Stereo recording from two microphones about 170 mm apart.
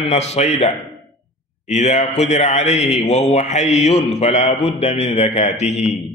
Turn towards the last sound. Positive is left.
turn(degrees=40)  # may be behind; listen again after turning